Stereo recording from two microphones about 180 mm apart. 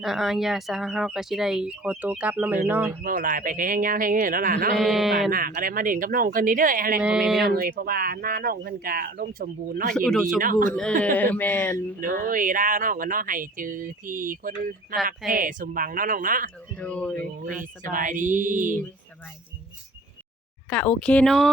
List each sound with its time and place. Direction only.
0.0 s speech: centre (ahead or behind)
3.0 s speech: 50° right (ahead or behind)
4.8 s speech: centre (ahead or behind)
5.3 s speech: 50° right (ahead or behind)
7.0 s speech: 5° right (ahead or behind)
7.4 s speech: 55° right (ahead or behind)
9.9 s speech: 5° left (ahead or behind)
10.4 s speech: 50° right (ahead or behind)
11.0 s speech: 10° left (ahead or behind)
11.9 s speech: 50° right (ahead or behind)
16.7 s speech: 5° left (ahead or behind)
17.9 s speech: 45° right (ahead or behind)
20.7 s speech: 10° left (ahead or behind)